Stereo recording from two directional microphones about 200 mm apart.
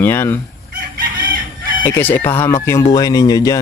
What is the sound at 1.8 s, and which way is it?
Speech, 10° left (ahead or behind).